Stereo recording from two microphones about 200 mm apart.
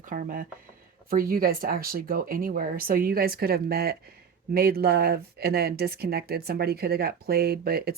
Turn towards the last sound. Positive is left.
turn(degrees=-50)  # may be behind; listen again after turning